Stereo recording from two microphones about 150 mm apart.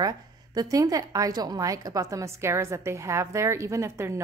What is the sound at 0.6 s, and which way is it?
A woman's voice, 25° right (ahead or behind).